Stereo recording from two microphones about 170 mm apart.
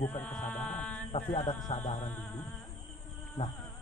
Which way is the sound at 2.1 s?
10° left (ahead or behind).